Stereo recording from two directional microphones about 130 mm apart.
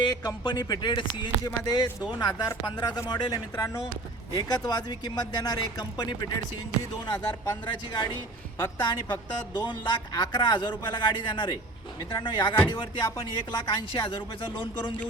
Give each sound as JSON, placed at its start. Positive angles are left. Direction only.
{"t": 0.0, "sound": "a man's voice", "side_deg": 30}
{"t": 4.4, "sound": "a man's voice", "side_deg": 30}